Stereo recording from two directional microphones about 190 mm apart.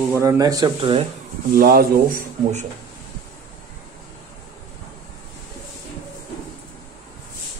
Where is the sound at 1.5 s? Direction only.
50° right (ahead or behind).